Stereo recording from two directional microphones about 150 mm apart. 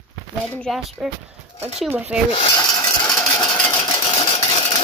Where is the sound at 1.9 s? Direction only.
10° right (ahead or behind).